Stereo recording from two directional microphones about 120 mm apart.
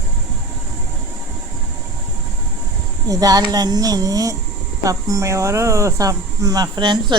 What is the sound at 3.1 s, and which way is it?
Speech, 30° right (ahead or behind).